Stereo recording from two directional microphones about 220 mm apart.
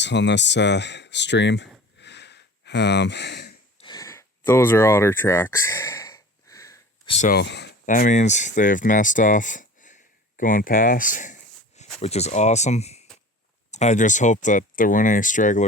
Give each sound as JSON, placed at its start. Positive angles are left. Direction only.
{"t": 0.0, "sound": "speech", "side_deg": 55}
{"t": 2.0, "sound": "a sound", "side_deg": 50}
{"t": 3.8, "sound": "a sound", "side_deg": 20}
{"t": 7.1, "sound": "speech", "side_deg": 30}
{"t": 7.3, "sound": "speech", "side_deg": 50}
{"t": 7.9, "sound": "speech", "side_deg": 35}